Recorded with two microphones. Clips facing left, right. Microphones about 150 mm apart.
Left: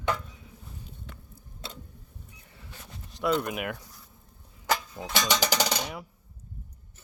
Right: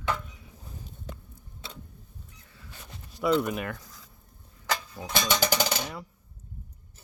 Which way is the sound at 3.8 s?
90° right.